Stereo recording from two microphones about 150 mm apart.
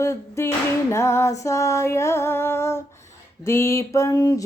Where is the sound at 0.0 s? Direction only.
20° left (ahead or behind).